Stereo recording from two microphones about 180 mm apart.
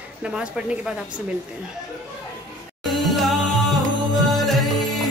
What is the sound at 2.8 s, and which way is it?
Music, centre (ahead or behind).